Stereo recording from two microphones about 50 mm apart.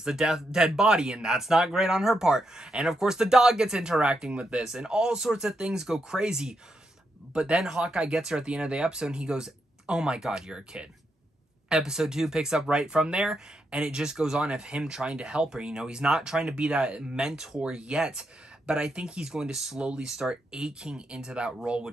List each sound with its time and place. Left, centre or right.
0.0 s speech: centre